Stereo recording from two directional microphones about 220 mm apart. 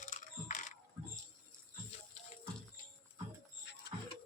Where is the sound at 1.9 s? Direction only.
30° left (ahead or behind).